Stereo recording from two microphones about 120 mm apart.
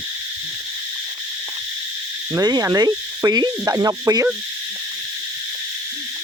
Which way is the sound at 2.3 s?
35° right (ahead or behind).